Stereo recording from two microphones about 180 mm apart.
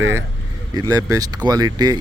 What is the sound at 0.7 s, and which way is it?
Speech, 20° right (ahead or behind).